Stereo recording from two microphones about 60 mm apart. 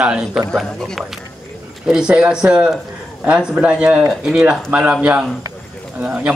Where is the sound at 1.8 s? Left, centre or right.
Centre.